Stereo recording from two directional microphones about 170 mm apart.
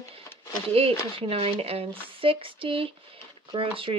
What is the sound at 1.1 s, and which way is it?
Speech, 35° right (ahead or behind).